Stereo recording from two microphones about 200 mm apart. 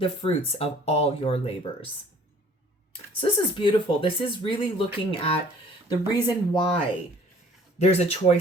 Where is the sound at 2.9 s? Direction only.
25° left (ahead or behind).